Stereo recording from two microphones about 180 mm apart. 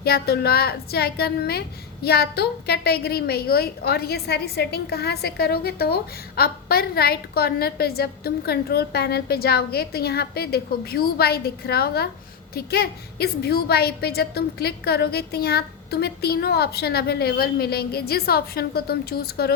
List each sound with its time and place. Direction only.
0.0 s a woman's voice: 60° left (ahead or behind)